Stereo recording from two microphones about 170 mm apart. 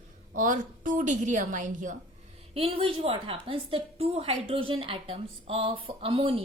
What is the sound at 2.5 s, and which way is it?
A woman's voice, 35° right (ahead or behind).